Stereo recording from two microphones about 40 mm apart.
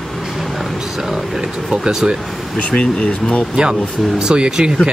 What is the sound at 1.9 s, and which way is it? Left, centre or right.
Speech, centre.